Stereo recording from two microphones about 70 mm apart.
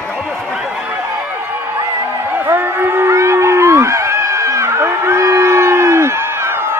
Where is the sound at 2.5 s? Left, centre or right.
Right.